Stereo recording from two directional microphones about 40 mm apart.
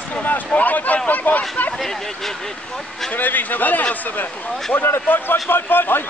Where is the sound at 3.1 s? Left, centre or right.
Left.